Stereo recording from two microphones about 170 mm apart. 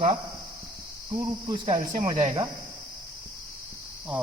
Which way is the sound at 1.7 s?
50° right (ahead or behind).